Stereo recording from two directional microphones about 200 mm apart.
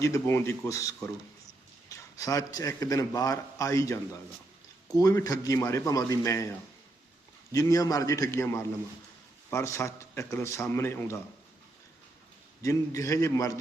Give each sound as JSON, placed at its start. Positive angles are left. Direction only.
{"t": 0.0, "sound": "a man's voice", "side_deg": 15}
{"t": 7.5, "sound": "a man's voice", "side_deg": 15}
{"t": 12.6, "sound": "a man's voice", "side_deg": 15}